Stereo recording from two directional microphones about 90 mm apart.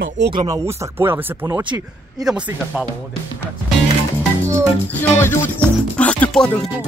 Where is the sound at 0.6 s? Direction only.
30° right (ahead or behind).